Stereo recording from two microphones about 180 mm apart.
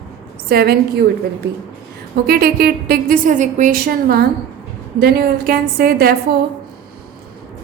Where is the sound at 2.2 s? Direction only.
55° right (ahead or behind).